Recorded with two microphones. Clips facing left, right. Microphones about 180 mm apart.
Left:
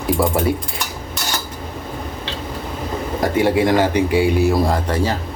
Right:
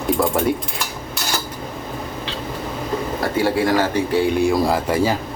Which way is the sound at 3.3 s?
20° left (ahead or behind).